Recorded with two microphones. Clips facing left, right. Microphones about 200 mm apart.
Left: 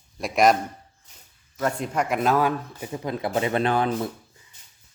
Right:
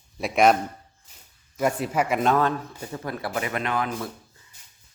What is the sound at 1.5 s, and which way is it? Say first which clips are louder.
A man's voice: right 2 dB; 10° right (ahead or behind).